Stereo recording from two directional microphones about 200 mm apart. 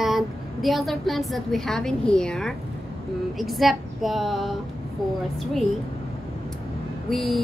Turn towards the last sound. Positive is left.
turn(degrees=0)  # may be behind; listen again after turning